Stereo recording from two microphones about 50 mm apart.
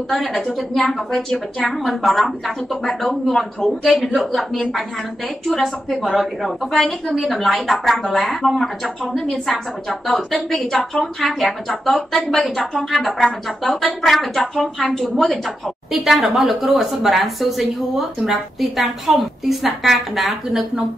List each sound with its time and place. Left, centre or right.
0.1 s a woman's voice: centre
6.1 s a woman's voice: centre